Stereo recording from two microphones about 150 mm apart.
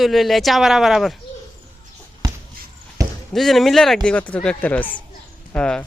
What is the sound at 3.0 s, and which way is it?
Basketball bounce, 20° right (ahead or behind).